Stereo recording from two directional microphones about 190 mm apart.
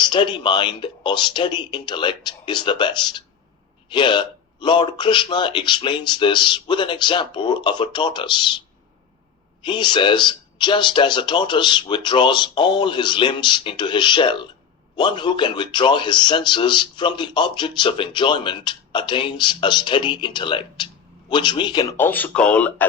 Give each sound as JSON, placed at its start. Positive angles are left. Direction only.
{"t": 0.0, "sound": "a man's voice", "side_deg": 25}
{"t": 9.6, "sound": "a man's voice", "side_deg": 25}